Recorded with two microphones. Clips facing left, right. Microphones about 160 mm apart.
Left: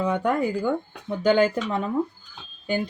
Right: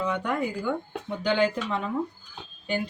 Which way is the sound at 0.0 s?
40° left (ahead or behind).